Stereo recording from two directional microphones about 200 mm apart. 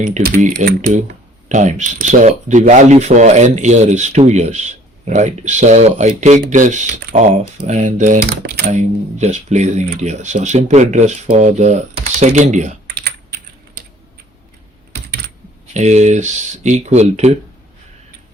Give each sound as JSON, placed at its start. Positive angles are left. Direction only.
{"t": 0.0, "sound": "speech", "side_deg": -40}
{"t": 15.7, "sound": "speech", "side_deg": -35}